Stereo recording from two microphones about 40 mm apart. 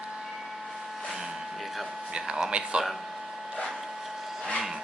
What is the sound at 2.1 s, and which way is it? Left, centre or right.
Speech, centre.